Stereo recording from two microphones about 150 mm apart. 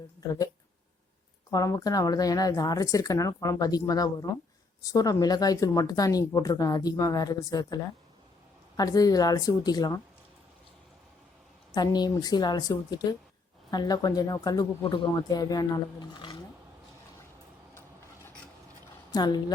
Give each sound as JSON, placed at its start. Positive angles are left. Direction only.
{"t": 1.5, "sound": "speech", "side_deg": 20}
{"t": 11.7, "sound": "speech", "side_deg": 25}
{"t": 19.1, "sound": "speech", "side_deg": 30}